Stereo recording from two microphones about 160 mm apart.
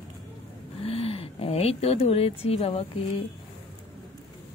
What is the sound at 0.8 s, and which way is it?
Speech, 40° left (ahead or behind).